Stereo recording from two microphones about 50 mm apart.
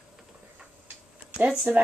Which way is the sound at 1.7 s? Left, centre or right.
Right.